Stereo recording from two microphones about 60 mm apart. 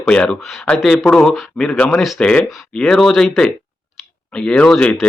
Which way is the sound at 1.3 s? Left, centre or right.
Centre.